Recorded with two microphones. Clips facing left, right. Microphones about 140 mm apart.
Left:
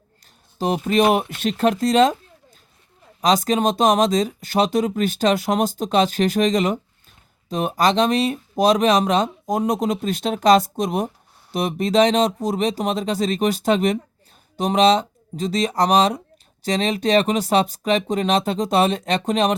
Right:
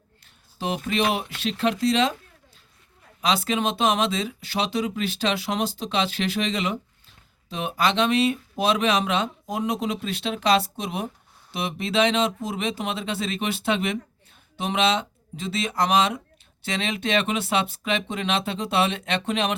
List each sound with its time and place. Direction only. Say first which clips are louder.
0.9 s speech: left 8 dB; 45° left (ahead or behind)
3.2 s speech: left 6 dB; 40° left (ahead or behind)